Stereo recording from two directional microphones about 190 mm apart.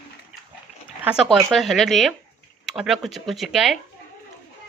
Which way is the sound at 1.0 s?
5° right (ahead or behind).